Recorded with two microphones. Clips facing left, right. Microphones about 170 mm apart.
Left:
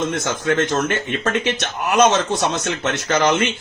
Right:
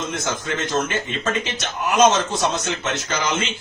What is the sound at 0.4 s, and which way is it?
Speech, 60° left (ahead or behind).